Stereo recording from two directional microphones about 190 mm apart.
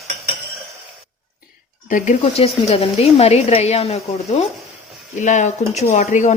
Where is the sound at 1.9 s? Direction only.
40° left (ahead or behind).